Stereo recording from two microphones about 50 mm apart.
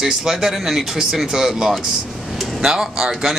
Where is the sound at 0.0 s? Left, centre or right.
Centre.